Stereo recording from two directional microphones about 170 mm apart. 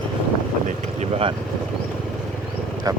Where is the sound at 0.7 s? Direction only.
35° right (ahead or behind).